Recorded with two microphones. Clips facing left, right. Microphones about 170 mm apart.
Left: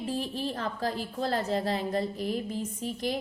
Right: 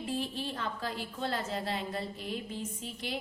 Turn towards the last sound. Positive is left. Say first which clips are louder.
# left 7 dB
turn(degrees=40)  # may be behind; listen again after turning